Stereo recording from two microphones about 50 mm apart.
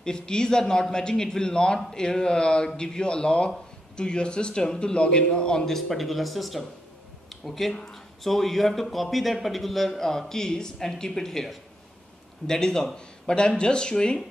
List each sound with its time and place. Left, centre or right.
0.0 s speech: centre
5.8 s a man's voice: centre